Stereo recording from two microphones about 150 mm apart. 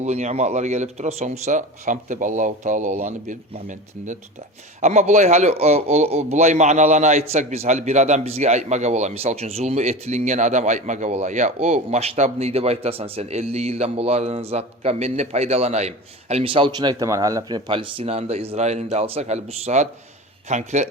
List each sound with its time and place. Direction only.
0.0 s a man's voice: 50° right (ahead or behind); by 17.6 s 25° right (ahead or behind)
17.7 s a man's voice: 35° right (ahead or behind)